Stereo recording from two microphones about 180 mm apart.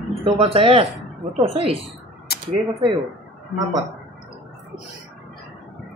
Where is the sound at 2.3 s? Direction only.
60° left (ahead or behind).